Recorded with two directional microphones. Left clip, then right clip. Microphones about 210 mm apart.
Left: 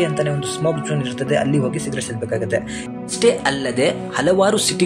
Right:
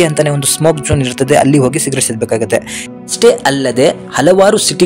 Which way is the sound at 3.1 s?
30° right (ahead or behind).